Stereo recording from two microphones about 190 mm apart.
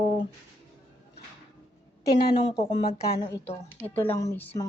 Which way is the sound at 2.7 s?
25° left (ahead or behind).